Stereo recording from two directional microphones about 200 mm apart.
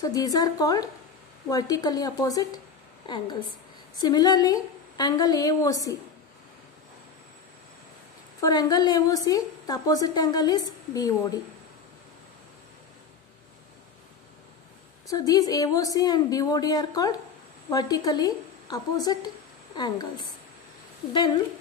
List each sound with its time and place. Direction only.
0.0 s a woman's voice: 20° left (ahead or behind)
8.4 s a woman's voice: 20° left (ahead or behind)
15.0 s a woman's voice: 20° left (ahead or behind)